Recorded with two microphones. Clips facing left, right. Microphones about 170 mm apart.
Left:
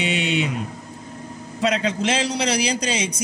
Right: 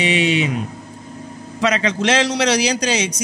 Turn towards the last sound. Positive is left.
turn(degrees=-80)